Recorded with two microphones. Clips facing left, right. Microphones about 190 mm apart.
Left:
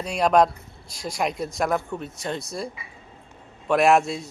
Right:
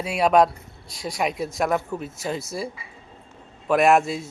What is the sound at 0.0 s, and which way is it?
Speech, 5° right (ahead or behind).